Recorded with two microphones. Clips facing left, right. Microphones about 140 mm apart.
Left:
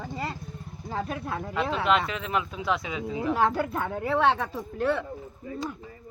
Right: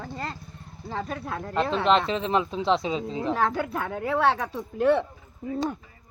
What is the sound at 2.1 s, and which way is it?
Speech, 30° right (ahead or behind).